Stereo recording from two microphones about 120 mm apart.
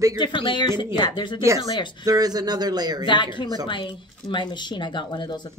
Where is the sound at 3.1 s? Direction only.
40° left (ahead or behind).